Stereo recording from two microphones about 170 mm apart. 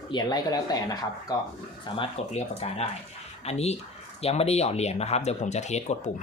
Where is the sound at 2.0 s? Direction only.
40° left (ahead or behind).